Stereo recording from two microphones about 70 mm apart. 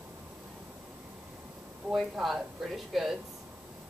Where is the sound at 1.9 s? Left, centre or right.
Centre.